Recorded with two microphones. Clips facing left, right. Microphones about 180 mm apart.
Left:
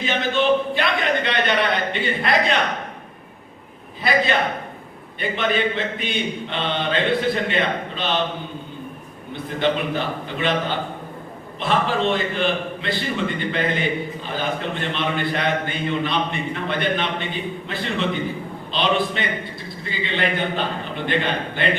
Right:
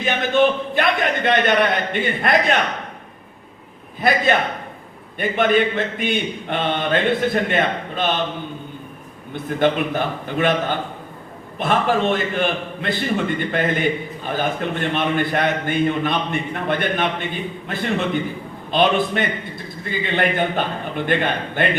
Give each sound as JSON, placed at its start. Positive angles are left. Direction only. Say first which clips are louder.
{"t": 0.0, "sound": "a sound", "louder": "right 4 dB", "side_deg": -50}
{"t": 5.2, "sound": "speech", "louder": "right 4 dB", "side_deg": -50}
{"t": 9.3, "sound": "speech", "louder": "right 3 dB", "side_deg": -50}